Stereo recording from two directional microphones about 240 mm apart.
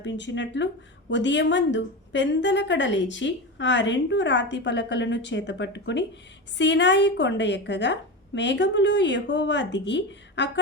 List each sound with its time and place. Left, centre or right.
0.0 s a woman's voice: left